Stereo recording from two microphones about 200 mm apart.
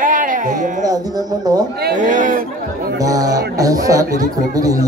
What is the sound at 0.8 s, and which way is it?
Music, 20° right (ahead or behind).